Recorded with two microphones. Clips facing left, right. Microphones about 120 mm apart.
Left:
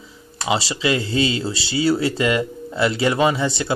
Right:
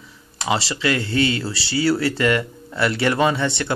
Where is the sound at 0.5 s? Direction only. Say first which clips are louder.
Left 1 dB; 15° left (ahead or behind).